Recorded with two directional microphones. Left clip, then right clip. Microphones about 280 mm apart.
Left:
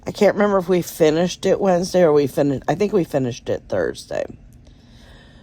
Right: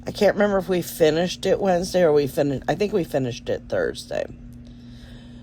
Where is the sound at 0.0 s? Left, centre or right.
Left.